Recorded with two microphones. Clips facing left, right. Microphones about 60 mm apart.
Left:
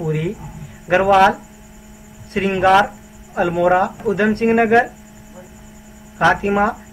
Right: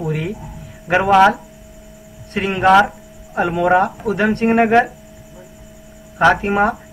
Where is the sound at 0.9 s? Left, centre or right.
Right.